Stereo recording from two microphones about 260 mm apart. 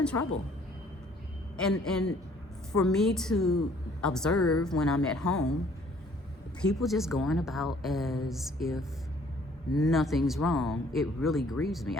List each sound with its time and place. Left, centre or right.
0.0 s a woman's voice: centre
1.8 s speech: centre
4.4 s a woman's voice: left
4.6 s speech: centre
6.7 s speech: centre